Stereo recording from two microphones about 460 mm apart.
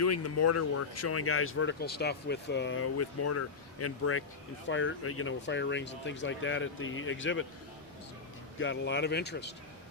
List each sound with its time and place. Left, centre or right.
0.0 s speech: left
8.5 s speech: left